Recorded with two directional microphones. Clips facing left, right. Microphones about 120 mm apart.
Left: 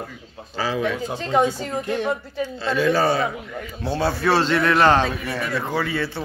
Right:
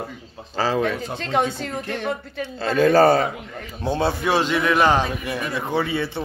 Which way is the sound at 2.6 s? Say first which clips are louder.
Right 5 dB; 45° right (ahead or behind).